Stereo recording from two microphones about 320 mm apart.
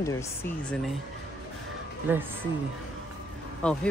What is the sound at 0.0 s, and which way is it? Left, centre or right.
Speech, centre.